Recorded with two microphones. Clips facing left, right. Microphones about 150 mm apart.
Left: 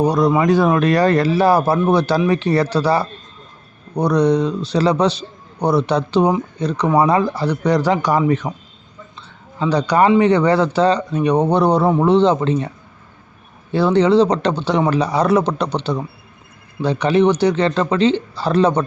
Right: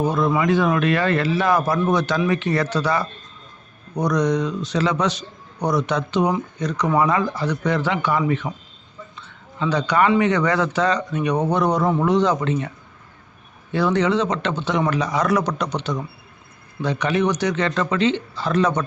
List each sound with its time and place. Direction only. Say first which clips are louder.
0.0 s speech: left 5 dB; 35° left (ahead or behind)
9.1 s a sound: left 4 dB; 30° left (ahead or behind)
10.2 s a man's voice: left 5 dB; 30° left (ahead or behind)
13.7 s speech: left 6 dB; 30° left (ahead or behind)